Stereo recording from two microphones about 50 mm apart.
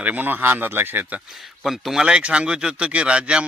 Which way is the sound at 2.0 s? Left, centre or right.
Centre.